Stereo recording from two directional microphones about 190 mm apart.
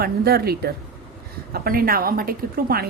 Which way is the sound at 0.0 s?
55° right (ahead or behind).